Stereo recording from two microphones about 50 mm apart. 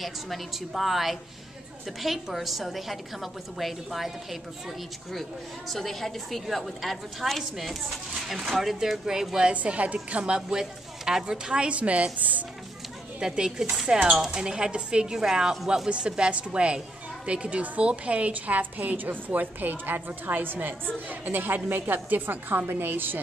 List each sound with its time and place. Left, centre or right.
0.0 s a woman's voice: centre
9.5 s a woman's voice: right
13.2 s a woman's voice: centre; by 23.2 s right